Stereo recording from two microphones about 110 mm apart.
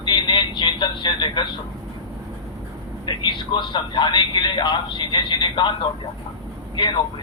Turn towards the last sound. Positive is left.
turn(degrees=45)  # may be behind; listen again after turning